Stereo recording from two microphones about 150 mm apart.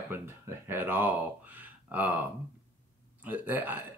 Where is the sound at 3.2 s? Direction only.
10° right (ahead or behind).